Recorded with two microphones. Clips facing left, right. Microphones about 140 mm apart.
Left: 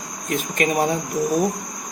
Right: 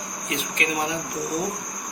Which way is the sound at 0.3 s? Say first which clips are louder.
Left 6 dB; 45° left (ahead or behind).